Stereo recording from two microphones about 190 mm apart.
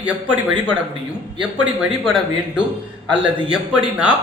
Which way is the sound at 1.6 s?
5° right (ahead or behind).